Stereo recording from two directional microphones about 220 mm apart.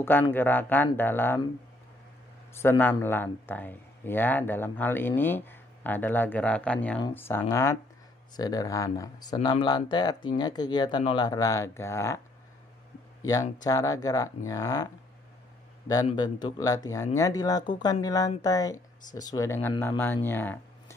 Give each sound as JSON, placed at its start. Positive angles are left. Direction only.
{"t": 0.0, "sound": "speech", "side_deg": 10}
{"t": 2.5, "sound": "speech", "side_deg": 10}
{"t": 13.2, "sound": "speech", "side_deg": 15}
{"t": 16.1, "sound": "speech", "side_deg": 20}